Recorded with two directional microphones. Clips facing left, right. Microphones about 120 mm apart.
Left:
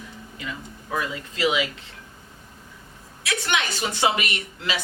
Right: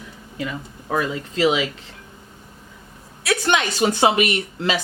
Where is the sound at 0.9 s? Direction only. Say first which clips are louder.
Right 5 dB; 35° right (ahead or behind).